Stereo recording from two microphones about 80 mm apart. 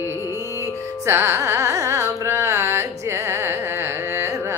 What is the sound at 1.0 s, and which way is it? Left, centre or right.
Carnatic music, right.